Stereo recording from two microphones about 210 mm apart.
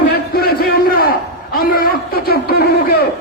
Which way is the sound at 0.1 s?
45° left (ahead or behind).